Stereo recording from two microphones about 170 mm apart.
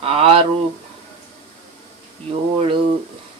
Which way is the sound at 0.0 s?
35° right (ahead or behind).